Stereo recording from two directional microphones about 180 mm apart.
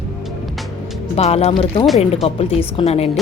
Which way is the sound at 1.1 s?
35° left (ahead or behind).